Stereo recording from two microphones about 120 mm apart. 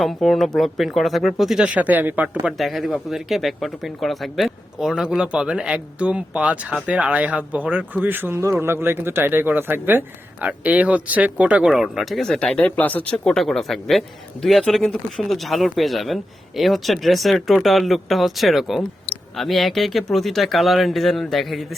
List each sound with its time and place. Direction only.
0.0 s speech: centre (ahead or behind)
2.6 s speech: centre (ahead or behind)